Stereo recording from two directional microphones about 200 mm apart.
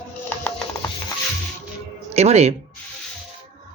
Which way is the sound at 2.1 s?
30° right (ahead or behind).